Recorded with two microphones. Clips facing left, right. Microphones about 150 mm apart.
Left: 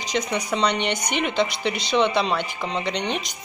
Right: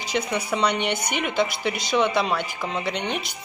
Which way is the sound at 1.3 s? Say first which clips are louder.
Right 1 dB; 20° left (ahead or behind).